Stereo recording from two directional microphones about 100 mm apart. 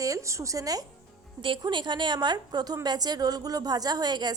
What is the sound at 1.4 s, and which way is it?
A woman's voice, 55° right (ahead or behind).